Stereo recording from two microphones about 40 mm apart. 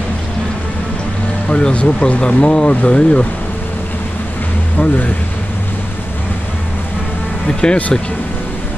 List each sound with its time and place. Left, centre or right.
1.5 s speech: left
4.7 s speech: left
7.4 s speech: left